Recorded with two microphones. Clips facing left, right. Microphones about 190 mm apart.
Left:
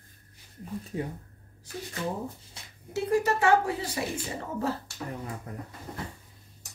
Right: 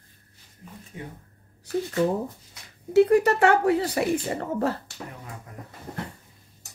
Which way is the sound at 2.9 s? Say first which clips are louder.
Right 8 dB; 65° right (ahead or behind).